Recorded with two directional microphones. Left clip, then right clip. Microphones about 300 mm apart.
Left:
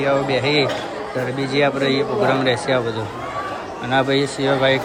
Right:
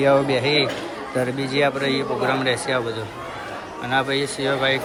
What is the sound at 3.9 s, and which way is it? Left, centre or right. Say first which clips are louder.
Speech: left 3 dB; centre.